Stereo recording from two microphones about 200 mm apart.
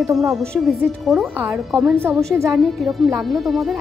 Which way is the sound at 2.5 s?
Centre (ahead or behind).